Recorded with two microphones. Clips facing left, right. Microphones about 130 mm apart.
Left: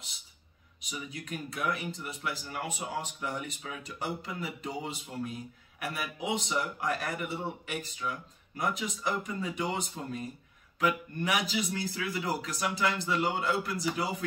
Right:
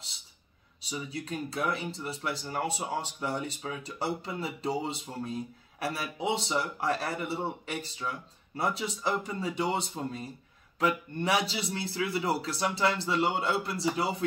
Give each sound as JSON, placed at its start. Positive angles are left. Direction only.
{"t": 0.7, "sound": "speech", "side_deg": -30}